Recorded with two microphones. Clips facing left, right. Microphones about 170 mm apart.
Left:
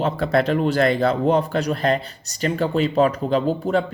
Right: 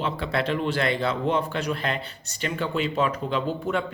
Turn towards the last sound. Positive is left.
turn(degrees=35)  # may be behind; listen again after turning